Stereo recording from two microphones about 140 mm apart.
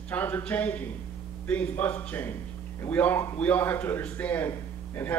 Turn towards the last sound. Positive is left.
turn(degrees=15)  # may be behind; listen again after turning